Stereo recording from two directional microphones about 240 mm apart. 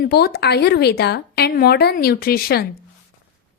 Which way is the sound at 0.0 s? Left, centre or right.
Left.